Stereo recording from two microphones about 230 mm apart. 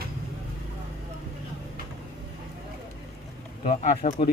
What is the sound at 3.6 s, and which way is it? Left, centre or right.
Speech, left.